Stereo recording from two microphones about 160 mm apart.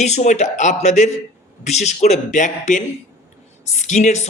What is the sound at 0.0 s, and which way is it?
A man's voice, 45° left (ahead or behind).